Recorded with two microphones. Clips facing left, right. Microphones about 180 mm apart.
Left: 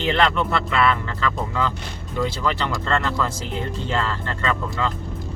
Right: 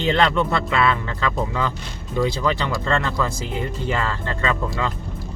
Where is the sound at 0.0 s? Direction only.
15° right (ahead or behind).